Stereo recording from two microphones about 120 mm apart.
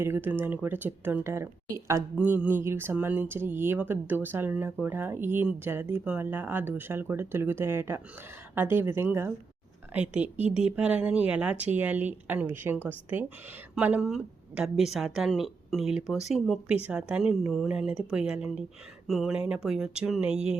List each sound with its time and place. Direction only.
0.0 s speech: 20° right (ahead or behind)
2.1 s a woman's voice: 15° right (ahead or behind)